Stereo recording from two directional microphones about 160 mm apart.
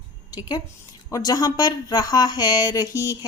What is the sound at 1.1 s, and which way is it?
Speech, 25° left (ahead or behind).